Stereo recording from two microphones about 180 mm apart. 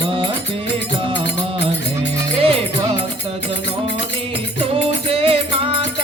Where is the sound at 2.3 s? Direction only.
30° right (ahead or behind).